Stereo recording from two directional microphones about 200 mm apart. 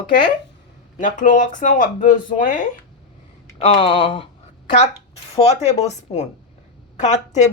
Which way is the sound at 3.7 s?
25° left (ahead or behind).